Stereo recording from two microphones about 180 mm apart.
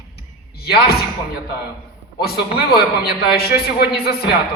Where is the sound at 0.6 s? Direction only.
60° left (ahead or behind).